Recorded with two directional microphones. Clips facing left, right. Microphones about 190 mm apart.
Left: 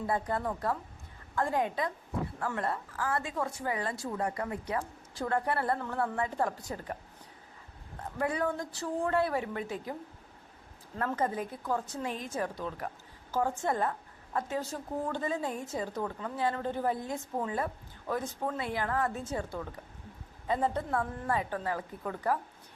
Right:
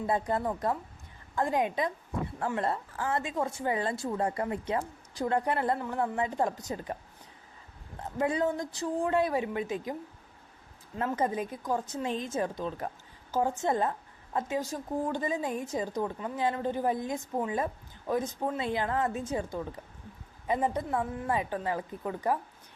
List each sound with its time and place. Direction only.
0.1 s a woman's voice: 20° right (ahead or behind)
8.2 s speech: 20° right (ahead or behind)
10.9 s a woman's voice: 20° right (ahead or behind)